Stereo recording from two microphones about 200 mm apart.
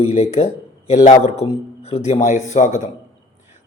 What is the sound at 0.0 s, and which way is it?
A man's voice, 30° left (ahead or behind).